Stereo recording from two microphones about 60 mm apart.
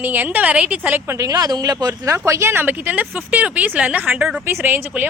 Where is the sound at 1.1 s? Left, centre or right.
Right.